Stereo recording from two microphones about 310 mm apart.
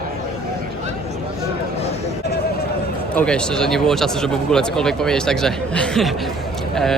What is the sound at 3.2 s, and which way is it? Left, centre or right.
Speech, centre.